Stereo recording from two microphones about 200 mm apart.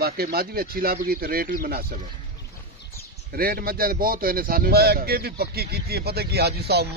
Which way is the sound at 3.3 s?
50° right (ahead or behind).